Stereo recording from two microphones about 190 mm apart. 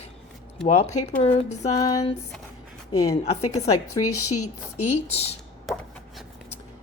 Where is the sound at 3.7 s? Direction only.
20° left (ahead or behind).